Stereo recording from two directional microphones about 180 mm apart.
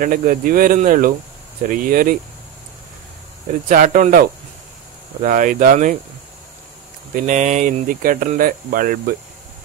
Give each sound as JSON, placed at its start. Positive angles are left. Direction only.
{"t": 0.0, "sound": "speech", "side_deg": -50}
{"t": 3.6, "sound": "speech", "side_deg": -50}
{"t": 7.2, "sound": "speech", "side_deg": -40}